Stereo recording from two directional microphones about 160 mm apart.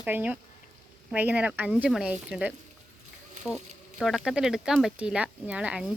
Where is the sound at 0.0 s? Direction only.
10° right (ahead or behind).